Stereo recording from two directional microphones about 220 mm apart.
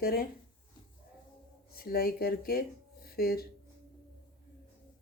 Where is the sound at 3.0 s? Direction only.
45° left (ahead or behind).